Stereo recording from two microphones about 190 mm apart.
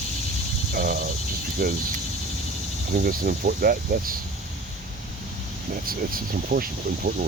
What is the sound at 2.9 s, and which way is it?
Speech, 50° right (ahead or behind).